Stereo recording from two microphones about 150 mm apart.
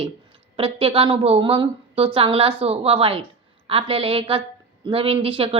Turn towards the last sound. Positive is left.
turn(degrees=-35)  # may be behind; listen again after turning